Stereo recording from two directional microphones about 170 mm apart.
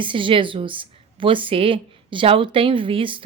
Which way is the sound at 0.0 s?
30° right (ahead or behind).